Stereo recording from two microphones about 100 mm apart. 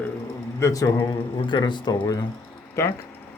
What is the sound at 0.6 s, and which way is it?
Speech, 35° left (ahead or behind).